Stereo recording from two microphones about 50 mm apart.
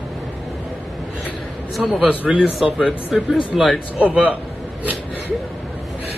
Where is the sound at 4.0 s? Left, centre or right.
Right.